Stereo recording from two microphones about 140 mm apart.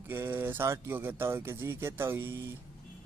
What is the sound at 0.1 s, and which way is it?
Speech, 15° right (ahead or behind).